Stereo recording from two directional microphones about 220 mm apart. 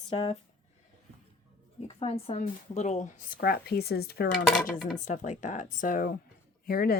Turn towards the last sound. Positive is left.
turn(degrees=45)  # may be behind; listen again after turning